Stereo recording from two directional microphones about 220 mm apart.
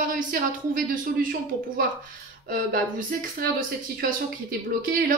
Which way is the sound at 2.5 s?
40° right (ahead or behind).